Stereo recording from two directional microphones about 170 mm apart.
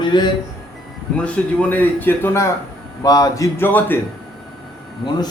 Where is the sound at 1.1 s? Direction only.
5° left (ahead or behind).